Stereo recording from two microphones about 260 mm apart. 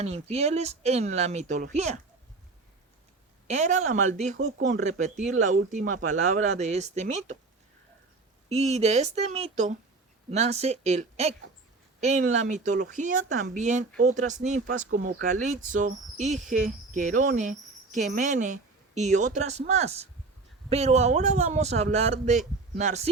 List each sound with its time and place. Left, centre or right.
0.0 s speech: right
3.4 s speech: right
8.4 s speech: right
16.5 s cricket: right
20.7 s speech: right